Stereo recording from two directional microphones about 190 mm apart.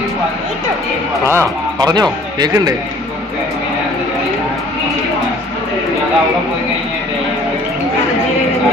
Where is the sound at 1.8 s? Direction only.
20° right (ahead or behind).